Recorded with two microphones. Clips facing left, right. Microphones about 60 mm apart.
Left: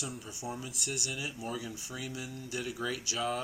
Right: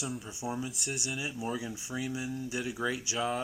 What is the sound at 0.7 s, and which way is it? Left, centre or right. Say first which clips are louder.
Speech: right 1 dB; centre.